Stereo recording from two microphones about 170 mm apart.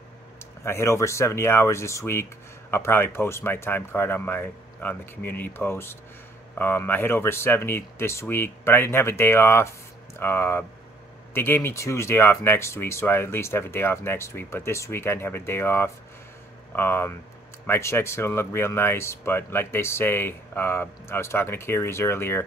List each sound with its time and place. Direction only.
0.4 s speech: 15° left (ahead or behind)